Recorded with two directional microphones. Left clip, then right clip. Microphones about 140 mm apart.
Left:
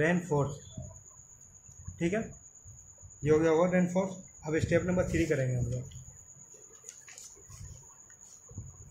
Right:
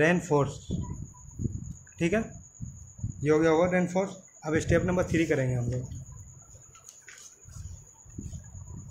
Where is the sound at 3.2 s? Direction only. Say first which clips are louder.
Right 2 dB; 50° right (ahead or behind).